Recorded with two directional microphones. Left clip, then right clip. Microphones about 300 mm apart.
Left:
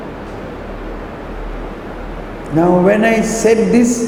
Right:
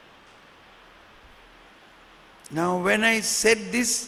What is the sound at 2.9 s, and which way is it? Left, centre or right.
Speech, right.